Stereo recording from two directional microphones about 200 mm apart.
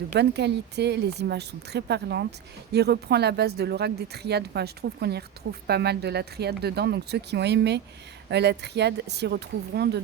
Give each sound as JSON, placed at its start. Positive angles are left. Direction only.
{"t": 0.2, "sound": "speech", "side_deg": -55}